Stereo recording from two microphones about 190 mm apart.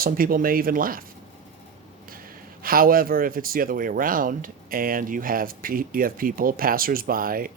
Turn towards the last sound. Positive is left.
turn(degrees=-50)  # may be behind; listen again after turning